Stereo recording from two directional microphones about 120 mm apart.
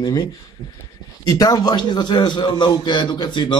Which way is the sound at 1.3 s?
30° left (ahead or behind).